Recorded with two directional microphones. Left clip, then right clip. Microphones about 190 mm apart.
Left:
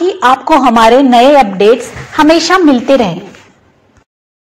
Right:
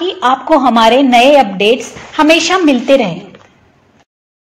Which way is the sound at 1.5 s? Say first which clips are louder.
Left 4 dB; centre (ahead or behind).